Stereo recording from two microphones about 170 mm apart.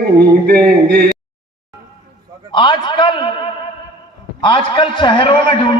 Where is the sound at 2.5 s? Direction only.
25° left (ahead or behind).